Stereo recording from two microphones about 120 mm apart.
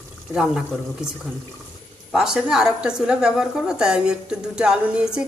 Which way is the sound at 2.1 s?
5° right (ahead or behind).